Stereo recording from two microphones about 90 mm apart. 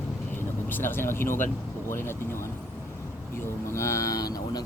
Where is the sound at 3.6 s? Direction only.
30° left (ahead or behind).